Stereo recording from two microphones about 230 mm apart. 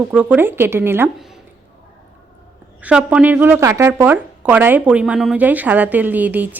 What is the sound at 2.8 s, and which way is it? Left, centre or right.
Speech, centre.